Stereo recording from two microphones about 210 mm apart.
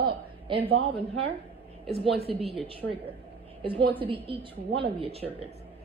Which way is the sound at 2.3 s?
25° right (ahead or behind).